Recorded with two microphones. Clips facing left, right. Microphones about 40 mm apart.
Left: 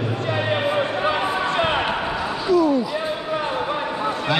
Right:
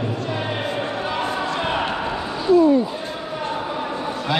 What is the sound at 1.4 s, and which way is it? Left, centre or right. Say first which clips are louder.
Basketball bounce: left 2 dB; left.